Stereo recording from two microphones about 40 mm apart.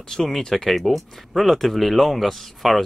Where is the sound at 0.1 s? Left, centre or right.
Centre.